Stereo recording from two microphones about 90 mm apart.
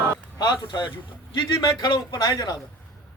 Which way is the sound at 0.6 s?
55° left (ahead or behind).